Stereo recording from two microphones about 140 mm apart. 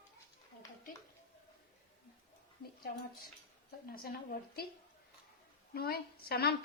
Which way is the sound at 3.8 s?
90° left.